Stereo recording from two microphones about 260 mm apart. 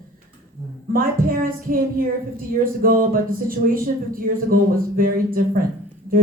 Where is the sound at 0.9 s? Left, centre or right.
Right.